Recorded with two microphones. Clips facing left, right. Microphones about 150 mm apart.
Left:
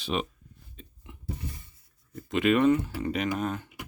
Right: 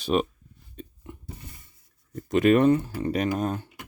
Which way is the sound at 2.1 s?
40° right (ahead or behind).